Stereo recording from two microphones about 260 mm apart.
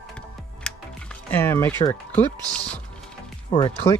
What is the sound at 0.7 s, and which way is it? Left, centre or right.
Music, centre.